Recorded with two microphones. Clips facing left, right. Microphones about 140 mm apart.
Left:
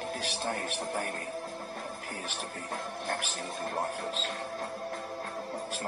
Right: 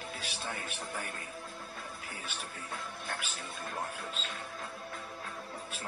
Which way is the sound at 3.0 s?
40° left (ahead or behind).